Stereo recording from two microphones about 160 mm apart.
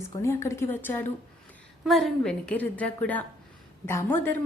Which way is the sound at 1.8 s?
Centre (ahead or behind).